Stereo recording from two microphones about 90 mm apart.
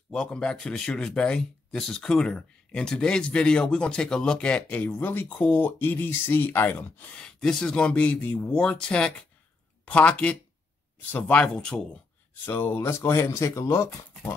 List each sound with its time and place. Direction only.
0.1 s speech: 10° left (ahead or behind)
7.2 s speech: 5° left (ahead or behind)
12.4 s speech: 20° left (ahead or behind)